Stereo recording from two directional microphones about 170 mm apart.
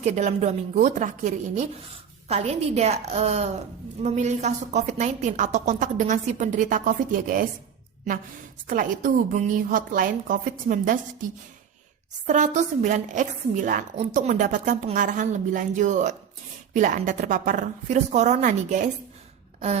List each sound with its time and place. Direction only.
0.0 s a woman's voice: 40° right (ahead or behind)
8.6 s a woman's voice: 50° right (ahead or behind)
12.2 s a woman's voice: 45° right (ahead or behind)